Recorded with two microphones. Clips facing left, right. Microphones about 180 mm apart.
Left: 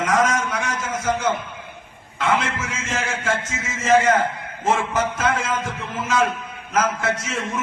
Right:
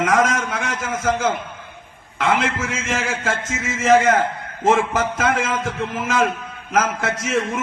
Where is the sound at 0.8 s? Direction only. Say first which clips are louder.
Right 5 dB; 90° right.